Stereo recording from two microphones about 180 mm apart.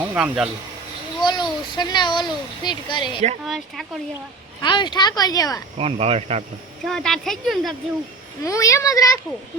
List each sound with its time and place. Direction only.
0.0 s speech: 5° right (ahead or behind)
1.2 s speech: 25° left (ahead or behind)
3.4 s speech: centre (ahead or behind)
4.6 s speech: 25° left (ahead or behind)
5.7 s speech: 35° right (ahead or behind)
6.8 s speech: centre (ahead or behind)
8.4 s speech: 15° left (ahead or behind)